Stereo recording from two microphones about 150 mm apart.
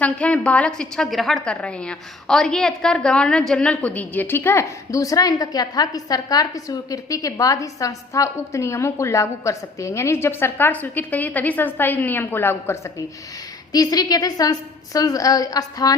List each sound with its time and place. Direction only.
0.0 s a woman's voice: 10° left (ahead or behind); by 16.0 s 25° left (ahead or behind)